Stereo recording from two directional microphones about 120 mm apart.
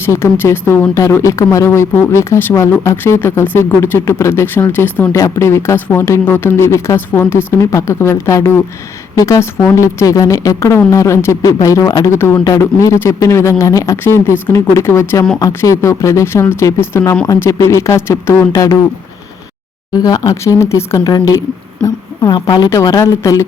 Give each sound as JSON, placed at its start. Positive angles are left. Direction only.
{"t": 0.0, "sound": "speech", "side_deg": 20}
{"t": 20.0, "sound": "speech", "side_deg": 30}